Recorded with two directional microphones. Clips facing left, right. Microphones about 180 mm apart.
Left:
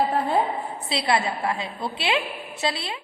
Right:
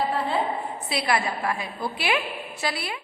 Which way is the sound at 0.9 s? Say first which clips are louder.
Left 2 dB; 25° left (ahead or behind).